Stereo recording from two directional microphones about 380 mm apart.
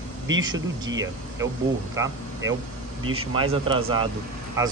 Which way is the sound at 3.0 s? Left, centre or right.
Right.